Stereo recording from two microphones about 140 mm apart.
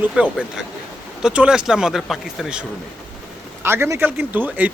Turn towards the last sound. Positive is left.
turn(degrees=-10)  # may be behind; listen again after turning